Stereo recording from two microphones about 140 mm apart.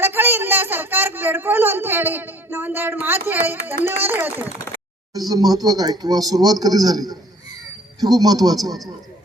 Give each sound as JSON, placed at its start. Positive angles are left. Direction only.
{"t": 0.0, "sound": "speech", "side_deg": -15}
{"t": 5.1, "sound": "speech", "side_deg": -25}